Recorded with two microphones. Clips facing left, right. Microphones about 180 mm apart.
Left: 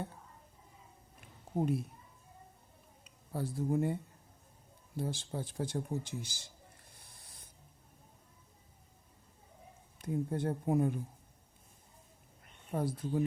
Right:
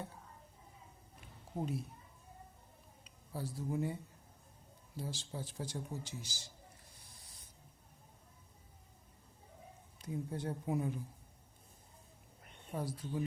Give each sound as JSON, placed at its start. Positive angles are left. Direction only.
{"t": 1.5, "sound": "speech", "side_deg": 55}
{"t": 3.0, "sound": "a sound", "side_deg": 50}
{"t": 4.9, "sound": "speech", "side_deg": 55}
{"t": 10.0, "sound": "speech", "side_deg": 55}
{"t": 12.7, "sound": "speech", "side_deg": 55}